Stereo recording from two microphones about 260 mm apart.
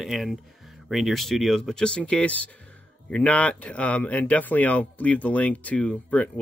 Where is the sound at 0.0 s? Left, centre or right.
Centre.